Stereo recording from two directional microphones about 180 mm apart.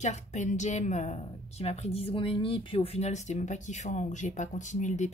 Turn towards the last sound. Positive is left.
turn(degrees=40)  # may be behind; listen again after turning